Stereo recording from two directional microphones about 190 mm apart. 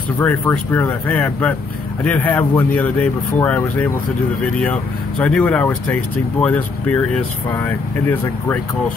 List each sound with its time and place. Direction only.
0.2 s speech: 10° left (ahead or behind)
5.2 s speech: 5° left (ahead or behind)